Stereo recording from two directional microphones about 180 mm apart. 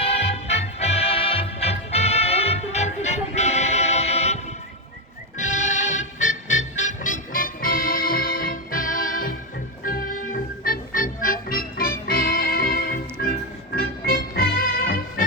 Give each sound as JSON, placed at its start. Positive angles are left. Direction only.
{"t": 0.0, "sound": "music", "side_deg": 35}
{"t": 5.4, "sound": "music", "side_deg": 40}